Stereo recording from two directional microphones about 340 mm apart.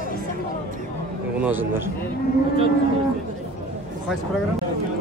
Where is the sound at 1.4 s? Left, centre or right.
Centre.